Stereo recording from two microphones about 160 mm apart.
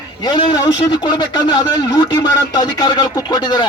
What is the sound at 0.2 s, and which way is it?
A man's voice, 30° left (ahead or behind).